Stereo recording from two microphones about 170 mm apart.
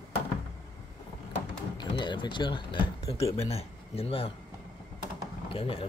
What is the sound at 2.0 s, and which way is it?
Speech, 25° left (ahead or behind).